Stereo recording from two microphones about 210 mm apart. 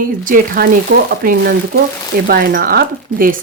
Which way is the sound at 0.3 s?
40° right (ahead or behind).